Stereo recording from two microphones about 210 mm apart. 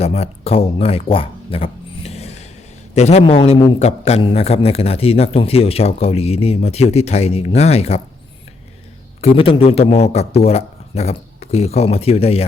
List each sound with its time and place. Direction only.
0.0 s a sound: 30° left (ahead or behind)
2.9 s a man's voice: 30° left (ahead or behind)
9.2 s a man's voice: 25° left (ahead or behind)